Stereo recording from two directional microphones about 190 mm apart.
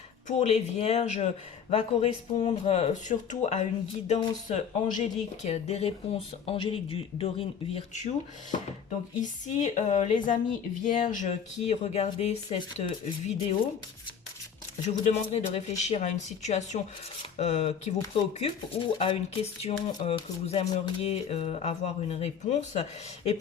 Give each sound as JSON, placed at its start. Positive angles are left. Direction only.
{"t": 0.3, "sound": "speech", "side_deg": 35}
{"t": 14.8, "sound": "speech", "side_deg": 35}